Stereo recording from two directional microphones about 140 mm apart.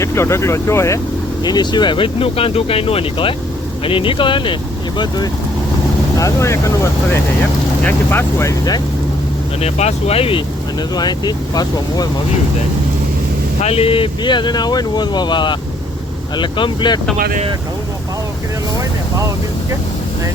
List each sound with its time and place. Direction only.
0.0 s speech: 20° left (ahead or behind)
1.5 s speech: 30° left (ahead or behind)
9.6 s speech: 50° left (ahead or behind)
10.9 s speech: 30° left (ahead or behind)
13.6 s speech: 45° left (ahead or behind)